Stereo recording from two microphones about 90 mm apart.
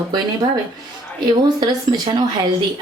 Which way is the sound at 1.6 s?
55° right (ahead or behind).